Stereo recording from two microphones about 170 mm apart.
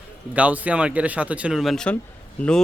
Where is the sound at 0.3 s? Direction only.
10° right (ahead or behind).